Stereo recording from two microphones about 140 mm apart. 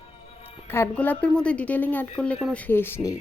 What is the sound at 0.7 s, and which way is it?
Speech, 15° left (ahead or behind).